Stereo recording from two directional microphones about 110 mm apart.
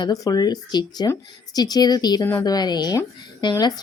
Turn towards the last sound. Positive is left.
turn(degrees=40)  # may be behind; listen again after turning